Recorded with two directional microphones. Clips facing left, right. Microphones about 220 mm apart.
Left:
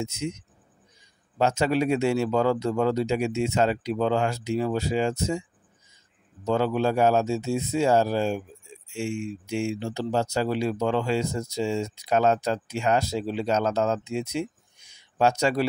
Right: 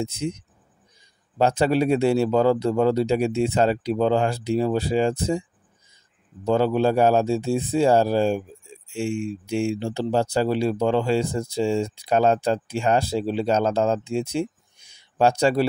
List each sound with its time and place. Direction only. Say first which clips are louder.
0.0 s speech: right 3 dB; 35° right (ahead or behind)
1.4 s speech: right 3 dB; 35° right (ahead or behind)